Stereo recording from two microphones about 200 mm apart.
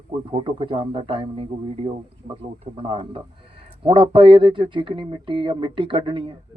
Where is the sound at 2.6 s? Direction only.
30° right (ahead or behind).